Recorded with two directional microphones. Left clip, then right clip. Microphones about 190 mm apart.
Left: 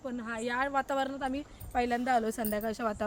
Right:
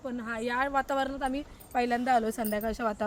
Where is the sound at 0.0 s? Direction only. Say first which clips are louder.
Right 2 dB; centre (ahead or behind).